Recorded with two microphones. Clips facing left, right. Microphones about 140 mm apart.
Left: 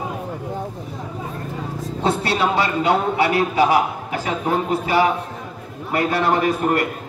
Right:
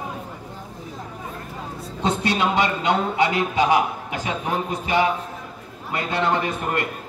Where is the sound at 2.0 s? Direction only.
20° right (ahead or behind).